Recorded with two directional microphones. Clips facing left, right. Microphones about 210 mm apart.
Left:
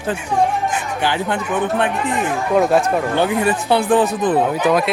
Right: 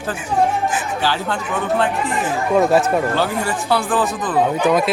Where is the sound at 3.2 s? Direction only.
20° left (ahead or behind).